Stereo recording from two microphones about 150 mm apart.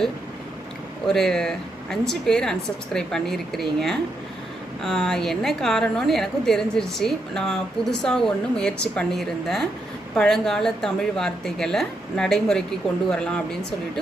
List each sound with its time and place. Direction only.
1.0 s speech: 5° left (ahead or behind)